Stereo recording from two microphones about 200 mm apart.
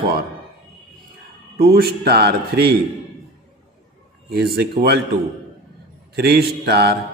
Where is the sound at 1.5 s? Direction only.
50° right (ahead or behind).